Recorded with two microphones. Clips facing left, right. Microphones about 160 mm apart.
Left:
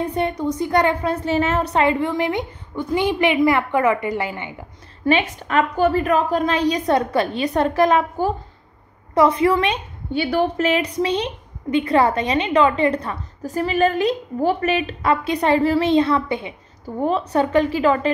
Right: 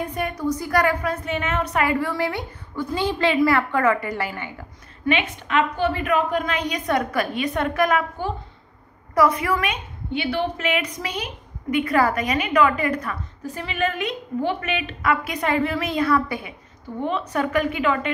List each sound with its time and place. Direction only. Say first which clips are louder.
0.0 s a woman's voice: left 4 dB; 30° left (ahead or behind)
5.5 s a woman's voice: left 4 dB; 40° left (ahead or behind)